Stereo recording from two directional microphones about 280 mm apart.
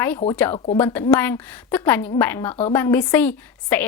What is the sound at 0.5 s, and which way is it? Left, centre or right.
Speech, left.